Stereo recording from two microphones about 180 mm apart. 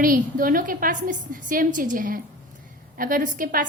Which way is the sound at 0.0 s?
50° right (ahead or behind).